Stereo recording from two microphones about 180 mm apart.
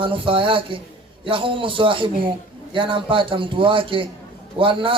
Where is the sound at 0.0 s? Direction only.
30° right (ahead or behind).